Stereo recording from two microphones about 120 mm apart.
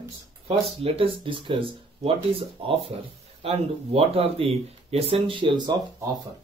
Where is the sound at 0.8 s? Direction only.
50° right (ahead or behind).